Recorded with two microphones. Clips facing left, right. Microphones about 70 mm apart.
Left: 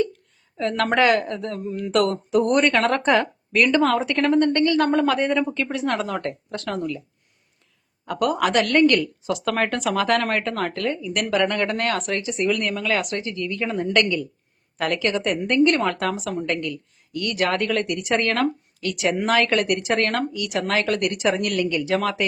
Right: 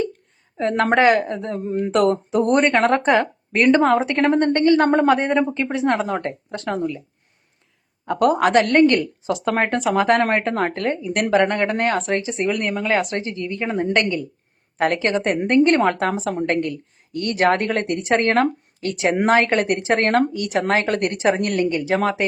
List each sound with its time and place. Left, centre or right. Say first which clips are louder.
0.5 s a woman's voice: right 3 dB; right
8.0 s a woman's voice: right 5 dB; right
16.3 s a woman's voice: right 3 dB; right
16.6 s speech: right 6 dB; right